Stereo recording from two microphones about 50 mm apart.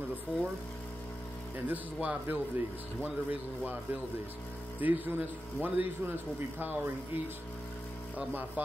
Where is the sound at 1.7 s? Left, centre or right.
Right.